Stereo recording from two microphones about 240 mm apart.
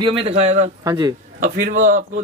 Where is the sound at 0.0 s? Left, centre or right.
Right.